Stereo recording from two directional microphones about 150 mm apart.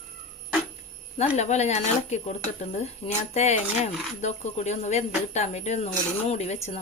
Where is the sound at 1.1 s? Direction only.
50° left (ahead or behind).